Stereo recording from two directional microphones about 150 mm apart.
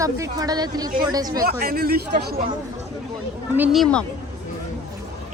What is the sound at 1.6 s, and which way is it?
Speech, 80° right.